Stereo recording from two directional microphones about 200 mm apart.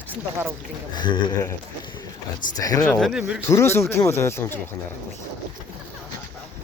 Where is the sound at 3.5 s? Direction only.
15° left (ahead or behind).